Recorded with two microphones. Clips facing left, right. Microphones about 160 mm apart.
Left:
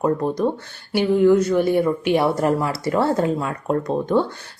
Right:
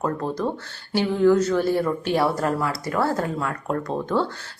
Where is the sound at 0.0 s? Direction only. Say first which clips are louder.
Left 5 dB; 15° left (ahead or behind).